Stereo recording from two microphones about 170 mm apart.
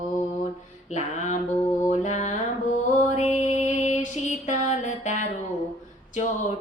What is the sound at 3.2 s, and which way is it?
Music, 40° left (ahead or behind).